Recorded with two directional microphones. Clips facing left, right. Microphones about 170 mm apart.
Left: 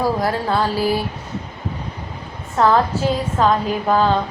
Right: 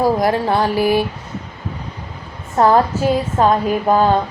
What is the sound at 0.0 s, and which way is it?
A woman's voice, 15° right (ahead or behind).